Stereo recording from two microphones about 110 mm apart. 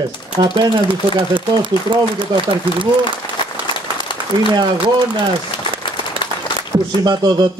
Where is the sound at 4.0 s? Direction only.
45° left (ahead or behind).